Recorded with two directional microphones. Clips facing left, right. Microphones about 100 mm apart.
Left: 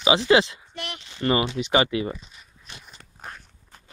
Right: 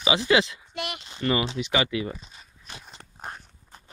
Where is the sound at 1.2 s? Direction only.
35° left (ahead or behind).